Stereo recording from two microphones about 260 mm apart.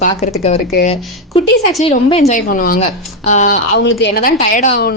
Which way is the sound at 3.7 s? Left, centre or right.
Left.